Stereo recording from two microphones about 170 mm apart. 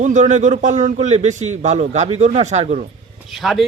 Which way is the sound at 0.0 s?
45° right (ahead or behind).